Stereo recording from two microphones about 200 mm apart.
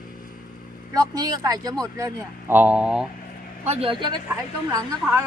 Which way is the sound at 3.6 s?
30° right (ahead or behind).